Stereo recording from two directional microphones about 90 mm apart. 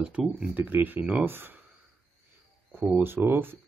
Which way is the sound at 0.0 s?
10° right (ahead or behind).